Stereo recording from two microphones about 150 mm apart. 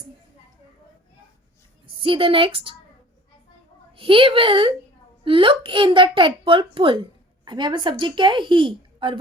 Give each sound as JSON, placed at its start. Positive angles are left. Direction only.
{"t": 2.0, "sound": "a woman's voice", "side_deg": -35}
{"t": 3.9, "sound": "a woman's voice", "side_deg": -35}